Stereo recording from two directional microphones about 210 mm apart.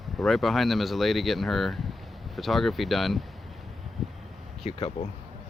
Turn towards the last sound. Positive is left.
turn(degrees=25)  # may be behind; listen again after turning